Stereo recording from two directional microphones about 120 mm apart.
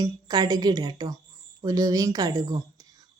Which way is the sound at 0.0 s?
35° right (ahead or behind).